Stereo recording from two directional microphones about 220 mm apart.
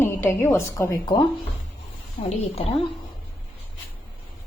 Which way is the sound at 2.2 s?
30° left (ahead or behind).